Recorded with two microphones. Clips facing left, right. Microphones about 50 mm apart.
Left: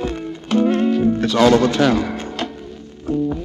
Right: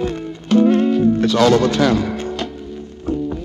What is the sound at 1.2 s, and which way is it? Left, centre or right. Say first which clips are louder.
Speech: left 2 dB; centre.